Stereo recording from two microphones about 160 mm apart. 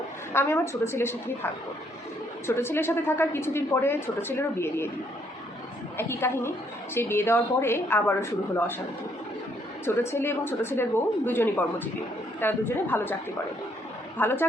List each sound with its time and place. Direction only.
0.3 s a woman's voice: 15° left (ahead or behind)
2.6 s a woman's voice: 15° left (ahead or behind)
6.0 s a woman's voice: 15° left (ahead or behind)
9.8 s a woman's voice: 15° left (ahead or behind)
14.2 s a woman's voice: 15° left (ahead or behind)